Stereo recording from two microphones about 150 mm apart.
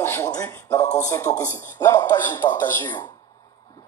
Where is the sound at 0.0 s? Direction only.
20° left (ahead or behind).